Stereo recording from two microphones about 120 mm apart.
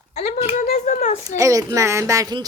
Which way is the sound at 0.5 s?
90° left.